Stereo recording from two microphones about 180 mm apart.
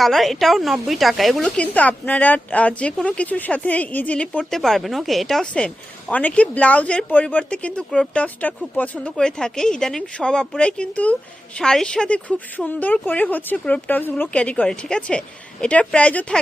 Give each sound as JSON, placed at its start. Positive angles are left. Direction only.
{"t": 0.0, "sound": "a woman's voice", "side_deg": 0}